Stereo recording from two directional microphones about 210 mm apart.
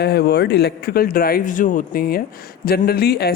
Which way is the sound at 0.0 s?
50° left (ahead or behind).